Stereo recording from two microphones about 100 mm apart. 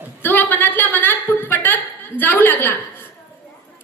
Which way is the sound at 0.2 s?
20° left (ahead or behind).